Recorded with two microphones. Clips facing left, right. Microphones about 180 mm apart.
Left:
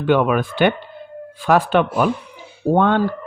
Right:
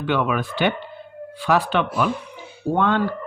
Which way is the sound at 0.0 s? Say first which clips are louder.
Left 6 dB; 50° left (ahead or behind).